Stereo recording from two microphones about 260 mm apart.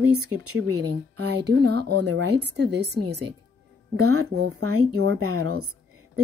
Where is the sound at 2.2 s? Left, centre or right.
Right.